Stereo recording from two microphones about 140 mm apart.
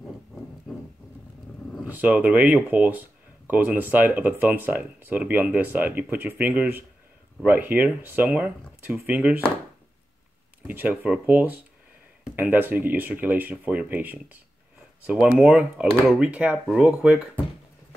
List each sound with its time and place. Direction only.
1.9 s speech: 10° right (ahead or behind)
10.7 s speech: 15° right (ahead or behind)
15.9 s speech: 5° left (ahead or behind)
16.2 s speech: 10° right (ahead or behind)